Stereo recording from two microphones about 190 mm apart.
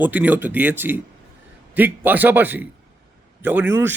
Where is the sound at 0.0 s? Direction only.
10° right (ahead or behind).